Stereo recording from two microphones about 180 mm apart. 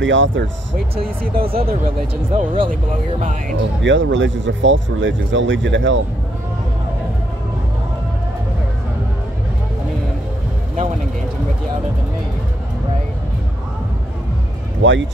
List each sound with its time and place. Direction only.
0.0 s speech: 90° right
1.2 s speech: 55° right (ahead or behind)
2.3 s speech: 30° right (ahead or behind)
3.8 s speech: 90° right
14.8 s speech: 90° right